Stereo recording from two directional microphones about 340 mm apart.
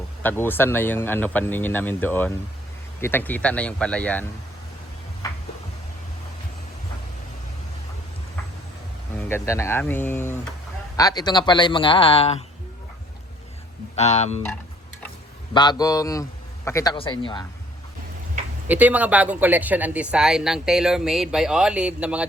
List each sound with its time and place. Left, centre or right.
0.2 s speech: centre
5.2 s a sound: centre
9.1 s speech: centre
13.9 s speech: centre
15.5 s speech: centre
18.7 s speech: centre